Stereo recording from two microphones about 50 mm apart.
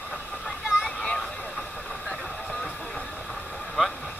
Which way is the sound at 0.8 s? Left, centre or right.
Centre.